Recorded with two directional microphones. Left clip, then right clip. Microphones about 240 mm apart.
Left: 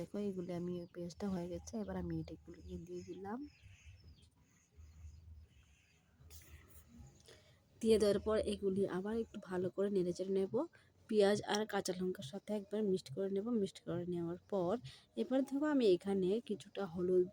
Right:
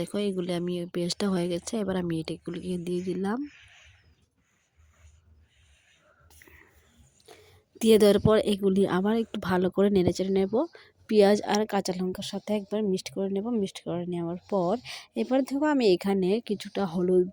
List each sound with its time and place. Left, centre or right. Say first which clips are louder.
0.0 s speech: right 13 dB; right
6.4 s whispering: right 16 dB; centre
7.3 s speech: right 15 dB; right